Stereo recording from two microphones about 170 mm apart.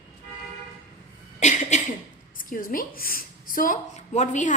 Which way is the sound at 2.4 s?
55° left (ahead or behind).